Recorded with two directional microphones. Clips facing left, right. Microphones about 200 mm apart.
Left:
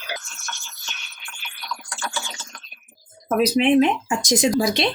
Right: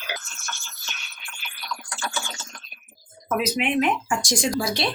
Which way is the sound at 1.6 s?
Centre (ahead or behind).